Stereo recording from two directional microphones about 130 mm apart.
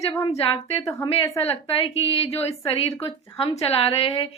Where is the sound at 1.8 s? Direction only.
50° left (ahead or behind).